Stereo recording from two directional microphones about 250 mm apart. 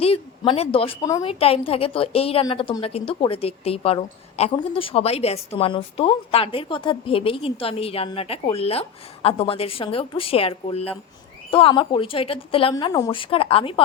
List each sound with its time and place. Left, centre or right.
0.0 s a woman's voice: left